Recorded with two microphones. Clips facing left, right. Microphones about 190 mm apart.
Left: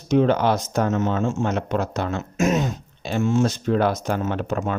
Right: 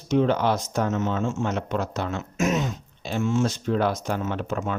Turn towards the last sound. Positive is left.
turn(degrees=60)  # may be behind; listen again after turning